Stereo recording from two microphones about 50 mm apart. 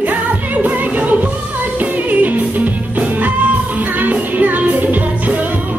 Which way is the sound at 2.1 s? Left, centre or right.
Right.